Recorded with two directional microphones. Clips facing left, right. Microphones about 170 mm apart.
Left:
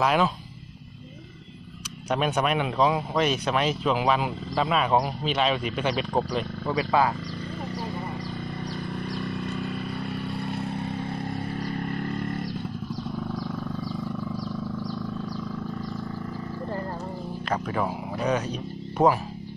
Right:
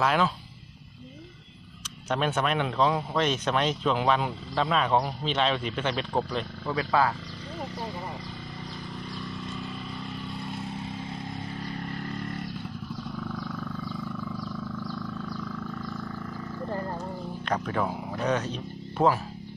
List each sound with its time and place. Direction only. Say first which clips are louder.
0.0 s speech: left 2 dB; 15° left (ahead or behind)
2.0 s speech: left 2 dB; 10° left (ahead or behind)
9.1 s a sound: left 5 dB; 65° left (ahead or behind)
10.2 s vehicle: left 5 dB; 60° left (ahead or behind)
13.3 s wild animals: left 3 dB; 40° left (ahead or behind)
17.5 s speech: left 1 dB; 5° left (ahead or behind)